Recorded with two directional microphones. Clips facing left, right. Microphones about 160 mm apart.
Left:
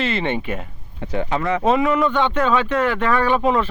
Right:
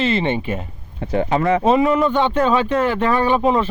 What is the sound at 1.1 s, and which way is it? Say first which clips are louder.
Speech: right 4 dB; 40° right (ahead or behind).